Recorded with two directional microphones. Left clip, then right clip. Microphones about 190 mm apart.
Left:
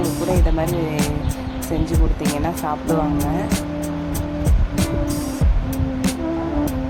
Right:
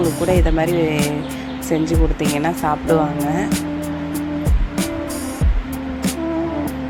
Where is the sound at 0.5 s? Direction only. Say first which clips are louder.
Right 5 dB; 15° right (ahead or behind).